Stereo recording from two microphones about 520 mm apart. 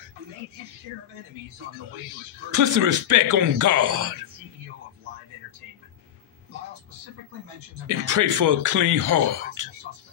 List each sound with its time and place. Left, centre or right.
2.5 s speech: right
7.8 s speech: right